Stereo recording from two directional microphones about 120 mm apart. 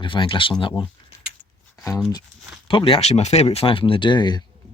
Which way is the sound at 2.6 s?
45° left (ahead or behind).